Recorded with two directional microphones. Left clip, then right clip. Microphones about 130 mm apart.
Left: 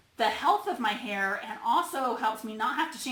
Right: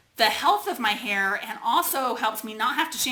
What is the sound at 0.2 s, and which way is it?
A woman's voice, 25° right (ahead or behind).